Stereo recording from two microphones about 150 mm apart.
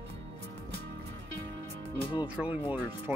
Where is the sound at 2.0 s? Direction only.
30° left (ahead or behind).